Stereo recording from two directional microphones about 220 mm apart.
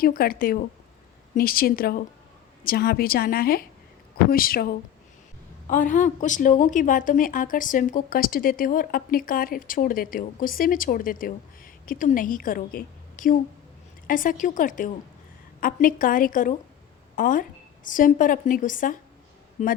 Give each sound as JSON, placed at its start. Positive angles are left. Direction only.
{"t": 0.0, "sound": "a woman's voice", "side_deg": 40}